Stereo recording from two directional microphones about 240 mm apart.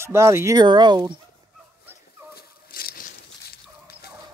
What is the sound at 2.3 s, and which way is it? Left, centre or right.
Fowl, left.